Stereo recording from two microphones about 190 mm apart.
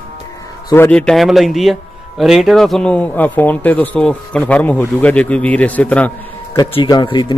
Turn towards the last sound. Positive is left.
turn(degrees=25)  # may be behind; listen again after turning